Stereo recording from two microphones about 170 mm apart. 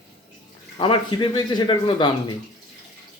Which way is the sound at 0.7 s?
30° left (ahead or behind).